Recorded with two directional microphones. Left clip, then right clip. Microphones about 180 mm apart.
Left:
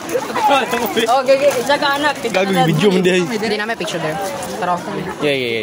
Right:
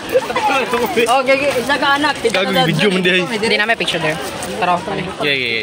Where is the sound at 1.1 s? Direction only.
45° right (ahead or behind).